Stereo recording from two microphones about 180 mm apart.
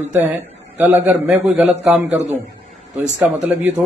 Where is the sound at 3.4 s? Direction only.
10° right (ahead or behind).